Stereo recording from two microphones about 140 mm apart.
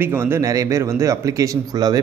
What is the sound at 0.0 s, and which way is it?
Speech, 15° right (ahead or behind).